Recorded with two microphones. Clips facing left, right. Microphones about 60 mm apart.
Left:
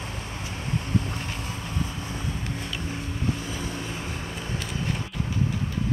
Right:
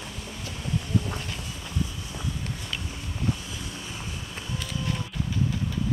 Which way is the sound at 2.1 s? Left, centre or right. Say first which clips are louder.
Left 2 dB; left.